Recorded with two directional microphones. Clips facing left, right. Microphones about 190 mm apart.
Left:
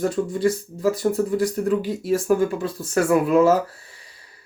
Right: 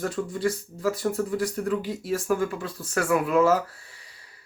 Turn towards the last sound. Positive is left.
turn(degrees=25)  # may be behind; listen again after turning